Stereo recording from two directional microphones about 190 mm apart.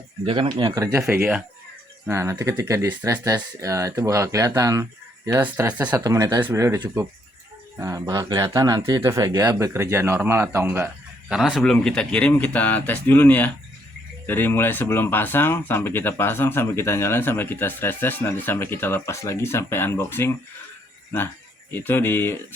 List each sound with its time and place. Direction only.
0.3 s speech: 25° right (ahead or behind); by 6.0 s 10° right (ahead or behind)
6.0 s speech: 20° right (ahead or behind)
11.3 s speech: 5° right (ahead or behind); by 20.3 s 10° left (ahead or behind)
21.7 s speech: 10° left (ahead or behind)